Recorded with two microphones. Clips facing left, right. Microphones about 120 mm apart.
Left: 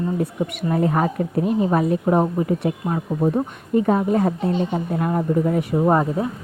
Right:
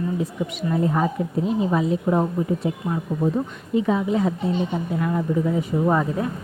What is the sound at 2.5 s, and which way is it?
Speech, 65° left (ahead or behind).